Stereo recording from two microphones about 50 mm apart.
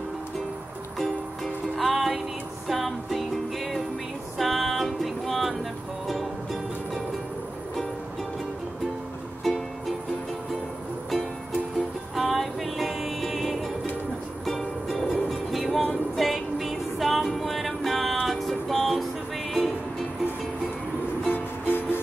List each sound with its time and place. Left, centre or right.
0.9 s music: centre
9.4 s music: centre
12.2 s music: centre
14.4 s ukulele: centre
15.9 s music: centre
21.3 s music: left